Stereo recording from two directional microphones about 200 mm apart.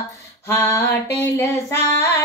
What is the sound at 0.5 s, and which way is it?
Female singing, 15° left (ahead or behind).